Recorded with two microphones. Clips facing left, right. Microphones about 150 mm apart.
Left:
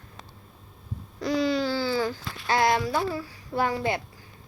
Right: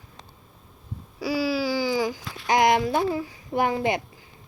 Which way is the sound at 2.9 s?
20° right (ahead or behind).